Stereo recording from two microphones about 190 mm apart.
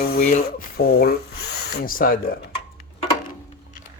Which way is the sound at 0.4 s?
55° left (ahead or behind).